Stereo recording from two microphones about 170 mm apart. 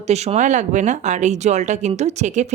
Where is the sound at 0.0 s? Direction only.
40° right (ahead or behind).